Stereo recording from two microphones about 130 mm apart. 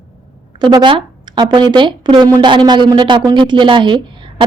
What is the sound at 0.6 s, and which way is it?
A woman's voice, 30° right (ahead or behind).